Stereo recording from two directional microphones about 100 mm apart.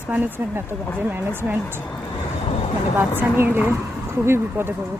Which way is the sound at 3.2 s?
20° right (ahead or behind).